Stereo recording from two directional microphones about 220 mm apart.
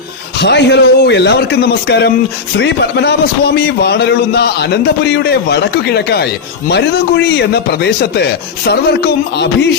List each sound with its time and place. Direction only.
0.3 s a man's voice: 50° left (ahead or behind)